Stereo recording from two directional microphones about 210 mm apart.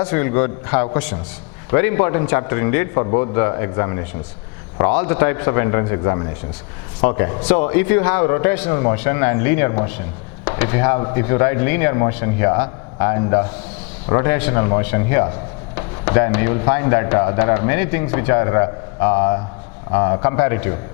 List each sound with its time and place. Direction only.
0.0 s a man's voice: 10° left (ahead or behind)